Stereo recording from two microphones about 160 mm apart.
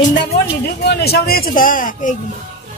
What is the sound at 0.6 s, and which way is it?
Speech, 90° left.